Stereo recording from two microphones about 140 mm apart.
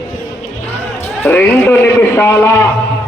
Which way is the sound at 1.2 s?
10° left (ahead or behind).